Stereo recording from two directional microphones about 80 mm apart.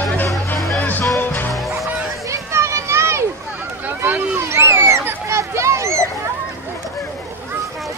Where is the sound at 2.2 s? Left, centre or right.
Right.